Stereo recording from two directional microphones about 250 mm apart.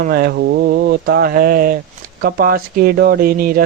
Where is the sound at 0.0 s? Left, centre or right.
Right.